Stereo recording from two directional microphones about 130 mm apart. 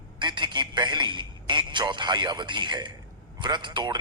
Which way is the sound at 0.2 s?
35° right (ahead or behind).